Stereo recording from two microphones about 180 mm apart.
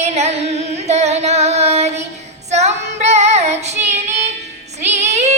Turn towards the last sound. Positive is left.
turn(degrees=-40)  # may be behind; listen again after turning